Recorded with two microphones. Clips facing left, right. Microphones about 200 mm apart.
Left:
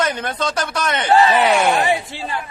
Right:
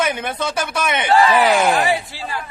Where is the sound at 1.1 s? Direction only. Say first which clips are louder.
Left 1 dB; 30° left (ahead or behind).